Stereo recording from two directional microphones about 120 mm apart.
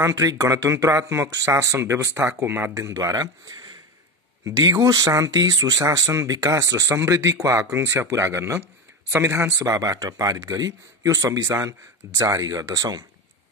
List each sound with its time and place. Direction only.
0.0 s speech: 30° right (ahead or behind)